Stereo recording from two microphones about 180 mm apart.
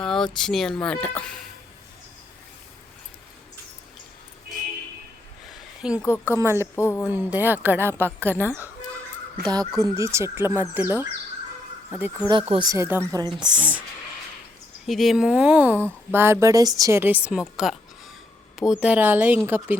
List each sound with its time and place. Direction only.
0.0 s a sound: centre (ahead or behind)
0.3 s speech: centre (ahead or behind)
5.8 s speech: 5° right (ahead or behind)
6.2 s speech: 15° right (ahead or behind)
6.7 s speech: 15° left (ahead or behind)
7.0 s speech: 10° right (ahead or behind)
8.2 s speech: 10° left (ahead or behind)
9.4 s speech: 20° right (ahead or behind)
12.3 s speech: 25° right (ahead or behind)
14.8 s speech: centre (ahead or behind)